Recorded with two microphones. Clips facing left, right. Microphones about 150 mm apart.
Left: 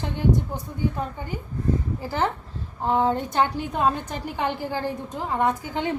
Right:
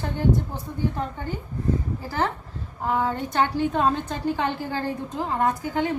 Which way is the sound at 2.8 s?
25° left (ahead or behind).